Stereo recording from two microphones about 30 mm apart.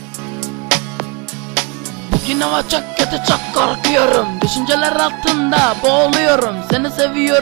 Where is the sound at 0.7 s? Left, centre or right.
Centre.